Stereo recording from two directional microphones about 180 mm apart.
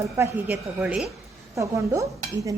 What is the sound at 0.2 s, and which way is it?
Speech, 10° right (ahead or behind).